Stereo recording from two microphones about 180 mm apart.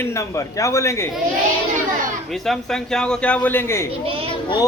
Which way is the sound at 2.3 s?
Centre (ahead or behind).